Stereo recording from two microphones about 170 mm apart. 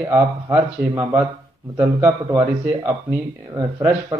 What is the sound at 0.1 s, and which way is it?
Speech, 15° right (ahead or behind).